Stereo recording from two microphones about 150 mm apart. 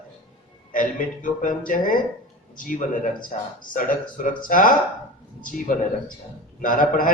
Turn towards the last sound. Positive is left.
turn(degrees=60)  # may be behind; listen again after turning